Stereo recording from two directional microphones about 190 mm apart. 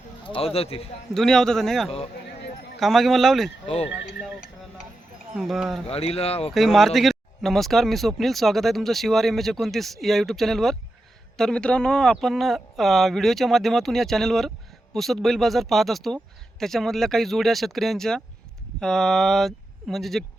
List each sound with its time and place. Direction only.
0.3 s a man's voice: 30° left (ahead or behind)
1.1 s speech: centre (ahead or behind)
5.3 s speech: centre (ahead or behind)
5.9 s a man's voice: 30° left (ahead or behind)
6.5 s speech: centre (ahead or behind)